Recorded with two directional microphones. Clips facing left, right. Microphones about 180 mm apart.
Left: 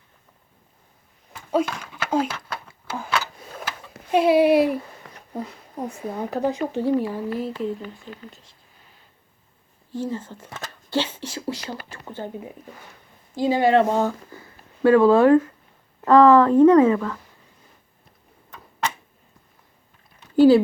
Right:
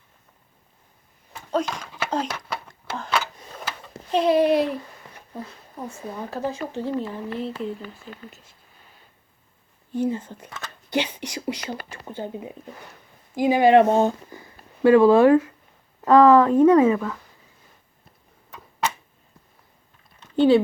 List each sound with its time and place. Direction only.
1.5 s a sound: 5° left (ahead or behind)
4.1 s speech: 10° left (ahead or behind)
5.8 s speech: 15° left (ahead or behind)
7.3 s speech: 5° left (ahead or behind)
9.9 s speech: 10° right (ahead or behind)
20.3 s a sound: 5° left (ahead or behind)